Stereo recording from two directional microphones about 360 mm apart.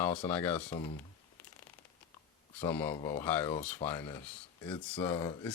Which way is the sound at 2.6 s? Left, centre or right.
Centre.